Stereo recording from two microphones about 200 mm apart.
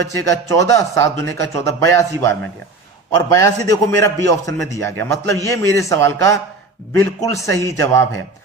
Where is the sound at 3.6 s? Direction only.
15° left (ahead or behind).